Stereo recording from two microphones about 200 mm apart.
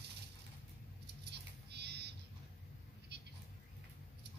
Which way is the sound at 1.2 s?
55° right (ahead or behind).